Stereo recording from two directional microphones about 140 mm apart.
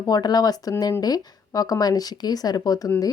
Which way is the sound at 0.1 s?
30° left (ahead or behind).